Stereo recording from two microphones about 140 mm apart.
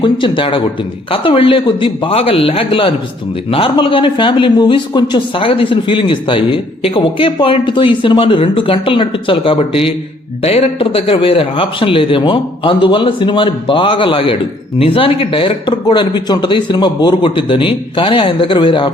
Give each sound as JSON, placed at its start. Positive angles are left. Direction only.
{"t": 0.0, "sound": "speech", "side_deg": 35}